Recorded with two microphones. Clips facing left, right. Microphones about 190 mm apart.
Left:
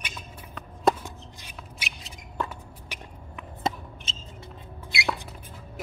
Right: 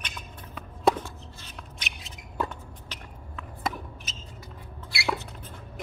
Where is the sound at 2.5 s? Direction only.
10° left (ahead or behind).